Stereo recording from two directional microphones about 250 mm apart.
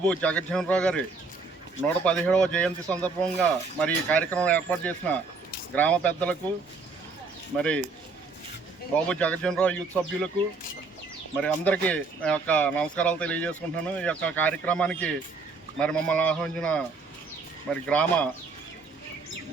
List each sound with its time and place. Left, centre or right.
0.0 s speech: centre
2.0 s speech: centre
7.5 s speech: centre
9.0 s speech: centre
11.3 s speech: centre
17.8 s speech: centre